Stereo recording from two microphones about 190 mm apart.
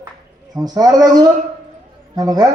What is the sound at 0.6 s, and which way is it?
Speech, 20° right (ahead or behind).